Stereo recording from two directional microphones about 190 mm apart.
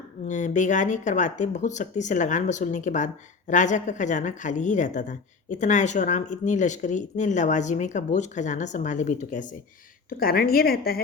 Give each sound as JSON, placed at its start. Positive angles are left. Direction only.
{"t": 0.3, "sound": "a woman's voice", "side_deg": 40}